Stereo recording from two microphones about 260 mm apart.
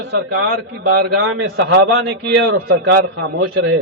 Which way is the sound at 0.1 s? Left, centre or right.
Right.